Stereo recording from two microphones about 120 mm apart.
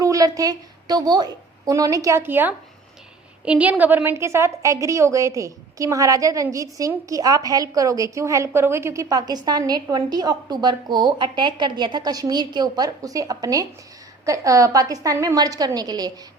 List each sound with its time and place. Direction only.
0.0 s a woman's voice: 30° right (ahead or behind)